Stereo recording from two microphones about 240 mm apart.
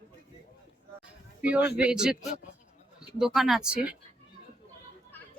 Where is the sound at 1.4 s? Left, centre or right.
Centre.